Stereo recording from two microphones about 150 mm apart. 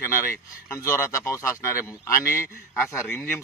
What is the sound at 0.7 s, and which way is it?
A man's voice, 20° left (ahead or behind).